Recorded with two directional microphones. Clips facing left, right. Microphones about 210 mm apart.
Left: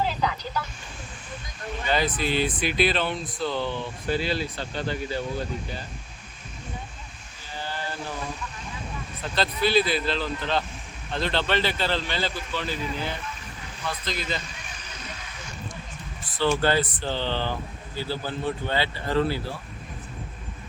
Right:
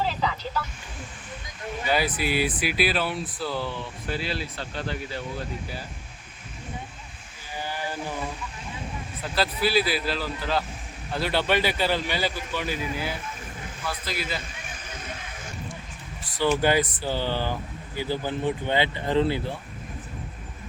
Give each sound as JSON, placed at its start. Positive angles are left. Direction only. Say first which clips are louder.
{"t": 1.9, "sound": "speech", "louder": "even", "side_deg": -10}
{"t": 7.5, "sound": "a sound", "louder": "right 1 dB", "side_deg": -15}
{"t": 9.2, "sound": "speech", "louder": "even", "side_deg": -5}
{"t": 16.2, "sound": "speech", "louder": "right 1 dB", "side_deg": -15}